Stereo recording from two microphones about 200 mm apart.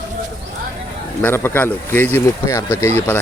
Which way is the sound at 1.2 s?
10° left (ahead or behind).